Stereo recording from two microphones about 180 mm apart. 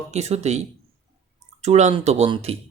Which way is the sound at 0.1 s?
35° right (ahead or behind).